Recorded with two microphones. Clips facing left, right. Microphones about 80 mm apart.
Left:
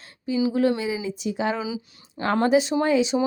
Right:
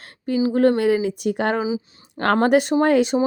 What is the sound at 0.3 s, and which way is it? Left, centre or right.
A woman's voice, right.